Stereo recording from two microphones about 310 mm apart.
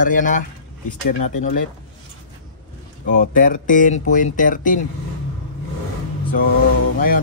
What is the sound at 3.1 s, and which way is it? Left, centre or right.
A man's voice, left.